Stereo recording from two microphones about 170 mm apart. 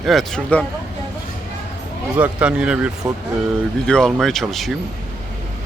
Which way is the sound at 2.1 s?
5° right (ahead or behind).